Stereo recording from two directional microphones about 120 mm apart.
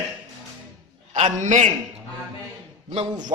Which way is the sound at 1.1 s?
80° right.